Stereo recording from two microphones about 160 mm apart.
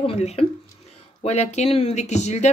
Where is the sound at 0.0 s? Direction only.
40° left (ahead or behind).